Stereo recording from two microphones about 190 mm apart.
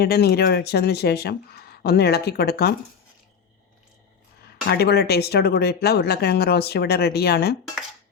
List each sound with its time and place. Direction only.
0.0 s speech: 55° left (ahead or behind)
4.7 s speech: 55° left (ahead or behind)